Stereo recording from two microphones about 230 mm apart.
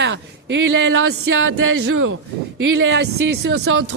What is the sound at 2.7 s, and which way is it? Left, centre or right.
Speech, right.